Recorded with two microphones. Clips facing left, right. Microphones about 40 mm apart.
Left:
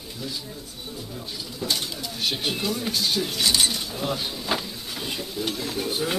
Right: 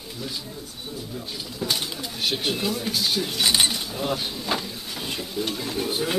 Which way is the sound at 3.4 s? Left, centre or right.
Centre.